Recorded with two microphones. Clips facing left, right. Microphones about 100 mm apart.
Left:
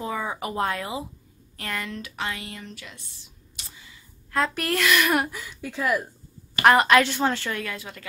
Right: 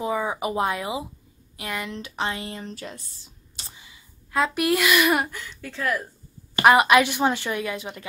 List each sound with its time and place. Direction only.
0.0 s a woman's voice: 15° right (ahead or behind); by 3.1 s 40° right (ahead or behind)
3.8 s a woman's voice: 10° right (ahead or behind); by 6.0 s 10° left (ahead or behind)
6.6 s a woman's voice: 10° right (ahead or behind)